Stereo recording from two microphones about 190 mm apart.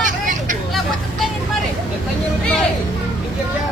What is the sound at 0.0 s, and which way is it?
Hubbub, 45° right (ahead or behind).